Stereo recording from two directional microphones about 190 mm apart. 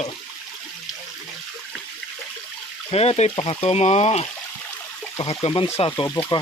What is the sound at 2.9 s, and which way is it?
Speech, 30° left (ahead or behind).